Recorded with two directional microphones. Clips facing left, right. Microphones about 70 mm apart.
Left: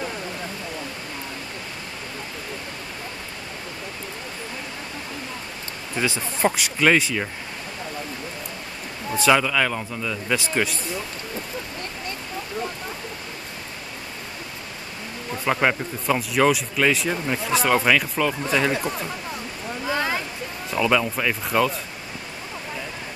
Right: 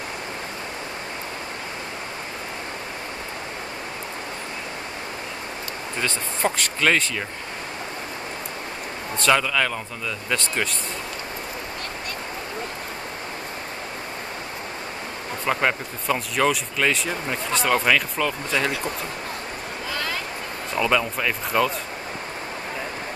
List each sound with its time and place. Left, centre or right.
5.9 s speech: centre
9.1 s speech: centre
15.4 s speech: centre
19.9 s a sound: left
20.7 s speech: centre